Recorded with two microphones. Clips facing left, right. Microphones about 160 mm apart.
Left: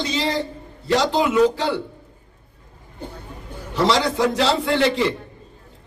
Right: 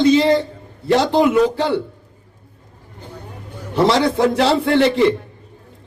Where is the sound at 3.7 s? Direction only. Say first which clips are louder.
Right 4 dB; 55° right (ahead or behind).